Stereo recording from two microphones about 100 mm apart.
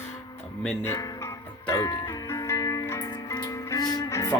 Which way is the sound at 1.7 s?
35° left (ahead or behind).